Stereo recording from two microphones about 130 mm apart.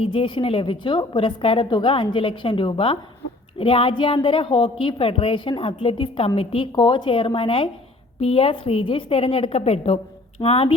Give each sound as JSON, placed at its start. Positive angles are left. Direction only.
{"t": 0.0, "sound": "a woman's voice", "side_deg": 40}